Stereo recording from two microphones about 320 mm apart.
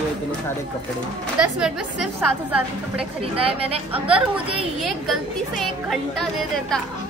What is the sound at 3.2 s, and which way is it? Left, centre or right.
Speech, centre.